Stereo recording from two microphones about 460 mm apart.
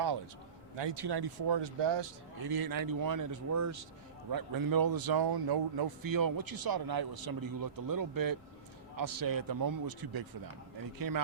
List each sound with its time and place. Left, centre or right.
0.8 s speech: right
4.3 s speech: right